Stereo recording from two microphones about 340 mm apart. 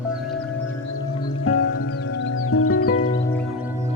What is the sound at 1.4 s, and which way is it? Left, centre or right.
Music, left.